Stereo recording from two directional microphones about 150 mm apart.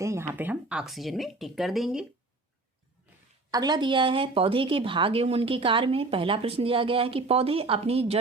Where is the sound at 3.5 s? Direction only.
25° right (ahead or behind).